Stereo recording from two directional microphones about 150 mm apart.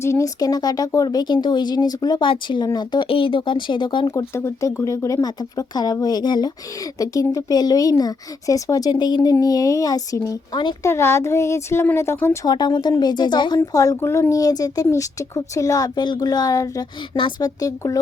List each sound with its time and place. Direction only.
0.0 s speech: 20° left (ahead or behind)
4.1 s speech: 20° left (ahead or behind)
10.8 s speech: 20° left (ahead or behind)